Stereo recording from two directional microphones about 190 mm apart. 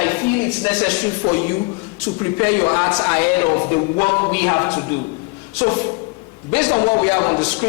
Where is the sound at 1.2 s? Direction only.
20° left (ahead or behind).